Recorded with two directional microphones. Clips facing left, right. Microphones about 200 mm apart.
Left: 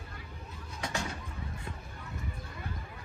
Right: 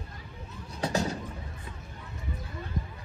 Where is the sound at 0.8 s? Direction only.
40° right (ahead or behind).